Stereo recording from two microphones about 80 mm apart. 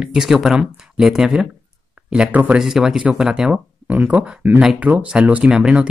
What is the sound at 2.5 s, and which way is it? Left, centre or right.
Speech, centre.